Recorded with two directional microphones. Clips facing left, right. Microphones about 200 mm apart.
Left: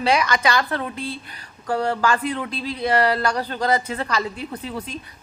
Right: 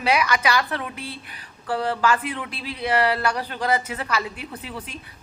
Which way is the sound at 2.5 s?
5° right (ahead or behind).